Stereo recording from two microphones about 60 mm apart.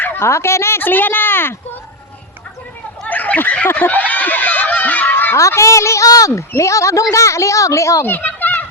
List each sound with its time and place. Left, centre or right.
0.0 s a sound: left
0.3 s a woman's voice: left
0.8 s speech: left
3.1 s a sound: left
3.8 s honk: left
5.4 s speech: left
6.1 s speech: left
6.5 s speech: left
8.0 s fowl: left